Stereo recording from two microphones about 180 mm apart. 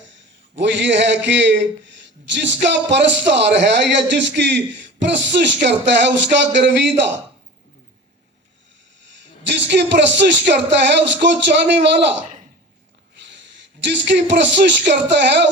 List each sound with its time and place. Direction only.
0.5 s speech: 80° right
9.5 s a man's voice: 75° right (ahead or behind)
13.8 s speech: 80° right